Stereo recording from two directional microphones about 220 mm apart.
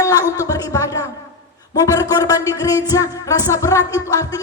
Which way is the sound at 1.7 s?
15° left (ahead or behind).